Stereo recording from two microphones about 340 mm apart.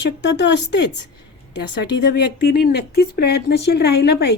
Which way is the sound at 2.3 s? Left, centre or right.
Left.